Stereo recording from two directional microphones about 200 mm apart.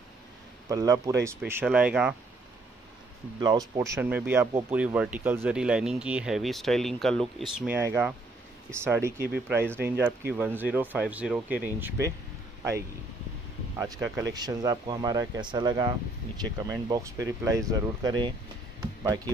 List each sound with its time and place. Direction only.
0.7 s speech: 20° right (ahead or behind)
3.3 s speech: 20° right (ahead or behind)
13.7 s speech: 15° right (ahead or behind)